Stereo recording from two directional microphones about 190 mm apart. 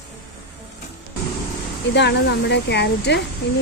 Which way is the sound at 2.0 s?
65° left (ahead or behind).